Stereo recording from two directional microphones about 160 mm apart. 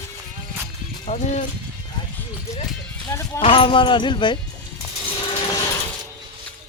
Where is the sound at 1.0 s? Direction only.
45° left (ahead or behind).